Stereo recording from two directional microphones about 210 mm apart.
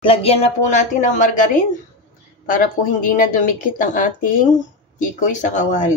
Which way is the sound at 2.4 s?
40° left (ahead or behind).